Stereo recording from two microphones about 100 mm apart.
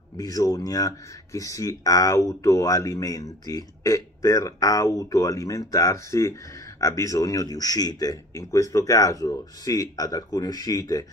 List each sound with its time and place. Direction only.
0.2 s speech: 35° left (ahead or behind)